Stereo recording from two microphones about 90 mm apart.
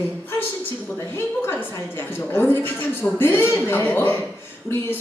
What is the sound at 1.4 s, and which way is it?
A woman's voice, 25° left (ahead or behind).